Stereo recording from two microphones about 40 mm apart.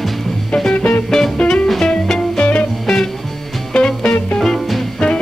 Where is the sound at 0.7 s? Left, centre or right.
Left.